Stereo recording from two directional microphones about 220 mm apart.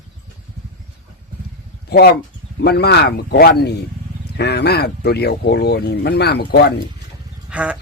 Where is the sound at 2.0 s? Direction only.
50° left (ahead or behind).